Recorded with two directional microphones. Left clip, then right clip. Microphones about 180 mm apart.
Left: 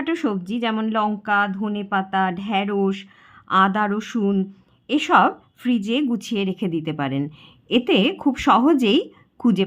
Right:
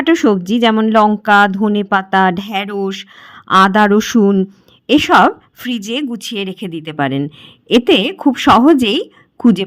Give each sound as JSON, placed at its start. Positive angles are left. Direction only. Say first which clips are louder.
{"t": 0.0, "sound": "a woman's voice", "louder": "right 12 dB", "side_deg": -35}